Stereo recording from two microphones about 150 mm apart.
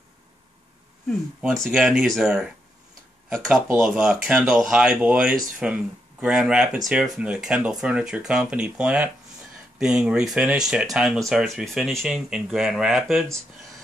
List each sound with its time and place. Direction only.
1.4 s speech: 5° right (ahead or behind)